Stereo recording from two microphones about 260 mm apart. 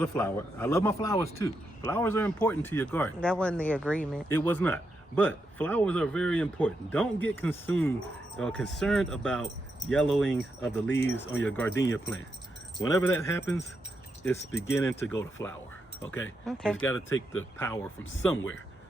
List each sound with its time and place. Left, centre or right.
0.0 s a man's voice: centre
14.7 s a man's voice: centre
17.1 s speech: left
18.3 s a man's voice: centre